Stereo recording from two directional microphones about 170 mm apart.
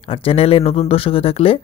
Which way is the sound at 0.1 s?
35° left (ahead or behind).